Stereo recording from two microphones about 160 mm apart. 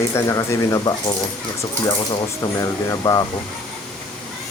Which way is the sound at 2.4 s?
20° left (ahead or behind).